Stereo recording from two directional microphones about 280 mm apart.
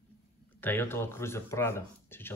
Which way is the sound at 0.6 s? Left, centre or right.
Centre.